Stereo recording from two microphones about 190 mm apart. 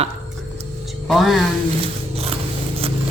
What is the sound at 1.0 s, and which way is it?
Speech, centre (ahead or behind).